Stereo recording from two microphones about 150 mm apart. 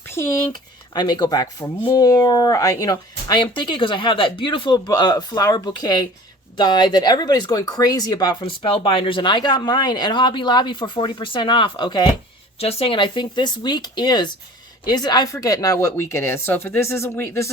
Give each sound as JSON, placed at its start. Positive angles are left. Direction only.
{"t": 0.0, "sound": "a sound", "side_deg": 15}
{"t": 0.9, "sound": "speech", "side_deg": 30}
{"t": 12.5, "sound": "speech", "side_deg": 40}